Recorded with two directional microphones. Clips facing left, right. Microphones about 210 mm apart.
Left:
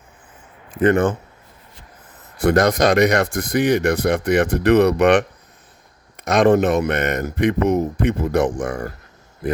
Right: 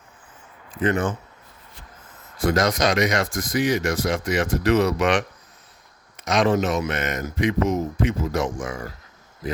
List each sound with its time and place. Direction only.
0.7 s speech: 55° left (ahead or behind)
2.5 s speech: 60° left (ahead or behind)